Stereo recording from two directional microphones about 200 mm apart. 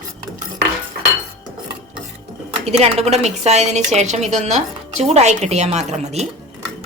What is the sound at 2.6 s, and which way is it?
A woman's voice, 30° right (ahead or behind).